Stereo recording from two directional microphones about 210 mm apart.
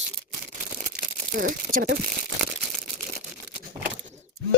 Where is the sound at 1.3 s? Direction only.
40° right (ahead or behind).